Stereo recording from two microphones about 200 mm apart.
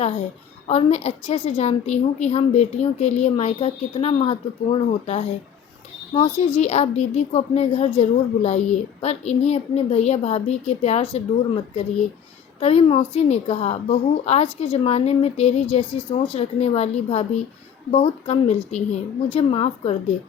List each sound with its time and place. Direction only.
0.7 s a woman's voice: 30° left (ahead or behind)